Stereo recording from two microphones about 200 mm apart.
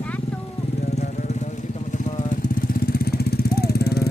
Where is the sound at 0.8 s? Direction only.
35° left (ahead or behind).